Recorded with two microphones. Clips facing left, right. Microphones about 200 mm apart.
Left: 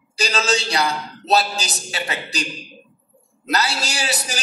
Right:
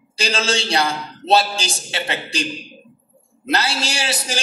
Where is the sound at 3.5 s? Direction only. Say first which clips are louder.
Right 1 dB; 25° right (ahead or behind).